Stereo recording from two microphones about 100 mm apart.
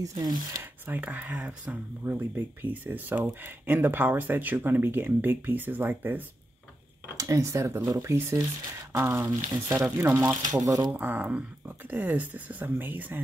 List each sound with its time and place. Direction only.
0.0 s speech: 40° right (ahead or behind)
0.6 s speech: 20° right (ahead or behind)
7.2 s speech: 35° right (ahead or behind)
10.5 s speech: 35° right (ahead or behind)
10.9 s speech: 20° right (ahead or behind)